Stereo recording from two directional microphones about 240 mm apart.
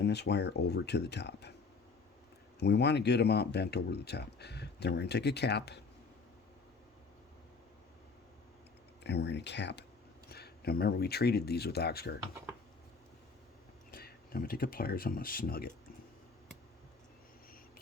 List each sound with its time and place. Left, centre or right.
0.0 s speech: left
2.6 s speech: left
9.0 s speech: left
13.9 s speech: left